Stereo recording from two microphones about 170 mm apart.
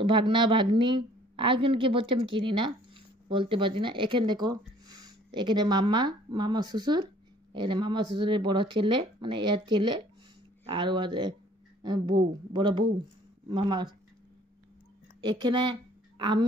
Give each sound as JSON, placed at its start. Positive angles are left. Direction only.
{"t": 0.0, "sound": "a woman's voice", "side_deg": -30}
{"t": 15.2, "sound": "a woman's voice", "side_deg": -30}